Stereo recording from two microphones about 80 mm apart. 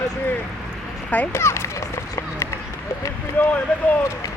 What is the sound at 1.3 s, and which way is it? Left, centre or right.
Speech, left.